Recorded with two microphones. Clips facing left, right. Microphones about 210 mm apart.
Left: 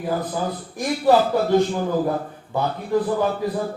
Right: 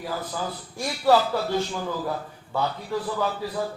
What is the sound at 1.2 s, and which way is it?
A man's voice, 55° left (ahead or behind).